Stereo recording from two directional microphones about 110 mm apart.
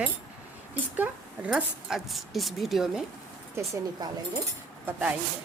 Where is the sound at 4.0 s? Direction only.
40° right (ahead or behind).